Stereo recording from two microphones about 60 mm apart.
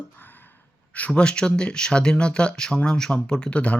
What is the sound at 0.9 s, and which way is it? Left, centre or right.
Speech, left.